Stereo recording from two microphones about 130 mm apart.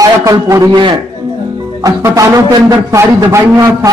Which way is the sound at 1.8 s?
30° right (ahead or behind).